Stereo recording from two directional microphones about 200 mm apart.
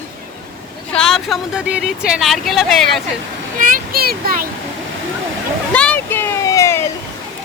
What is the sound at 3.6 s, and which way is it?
Speech, 45° right (ahead or behind).